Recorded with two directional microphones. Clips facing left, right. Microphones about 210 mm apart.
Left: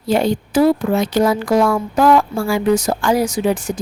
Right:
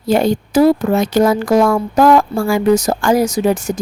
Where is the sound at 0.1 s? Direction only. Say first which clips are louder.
Right 2 dB; 45° right (ahead or behind).